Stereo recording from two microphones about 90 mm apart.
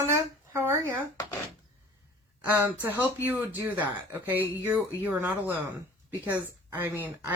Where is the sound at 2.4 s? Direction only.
20° right (ahead or behind).